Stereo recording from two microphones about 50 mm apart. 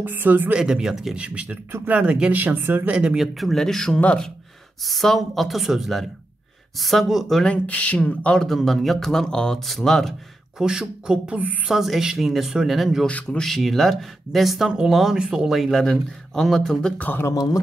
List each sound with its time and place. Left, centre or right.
0.0 s speech: right
0.5 s speech: centre
1.1 s speech: right
2.3 s speech: right
2.9 s speech: right
3.2 s speech: centre
7.4 s speech: left
8.5 s speech: centre
9.7 s speech: centre
10.6 s speech: centre
11.3 s speech: right
11.7 s speech: centre
15.1 s speech: centre
15.4 s speech: centre